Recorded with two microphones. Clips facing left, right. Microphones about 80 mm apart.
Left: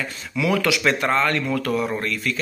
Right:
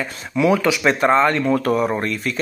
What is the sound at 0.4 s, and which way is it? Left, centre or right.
Speech, right.